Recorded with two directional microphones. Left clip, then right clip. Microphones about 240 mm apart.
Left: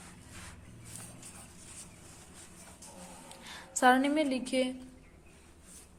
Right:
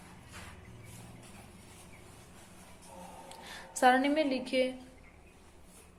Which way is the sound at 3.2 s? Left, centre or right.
Centre.